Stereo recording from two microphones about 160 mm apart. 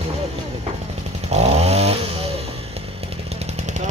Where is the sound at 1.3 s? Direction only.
40° right (ahead or behind).